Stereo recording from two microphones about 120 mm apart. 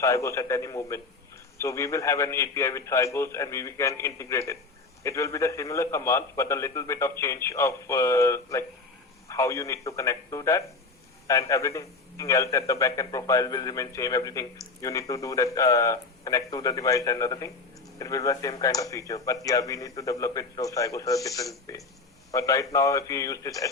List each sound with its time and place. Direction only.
0.0 s a man's voice: 25° left (ahead or behind)